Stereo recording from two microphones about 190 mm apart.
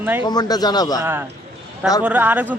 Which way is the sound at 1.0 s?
15° right (ahead or behind).